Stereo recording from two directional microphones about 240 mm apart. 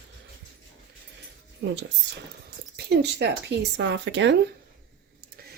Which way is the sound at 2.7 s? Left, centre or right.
Right.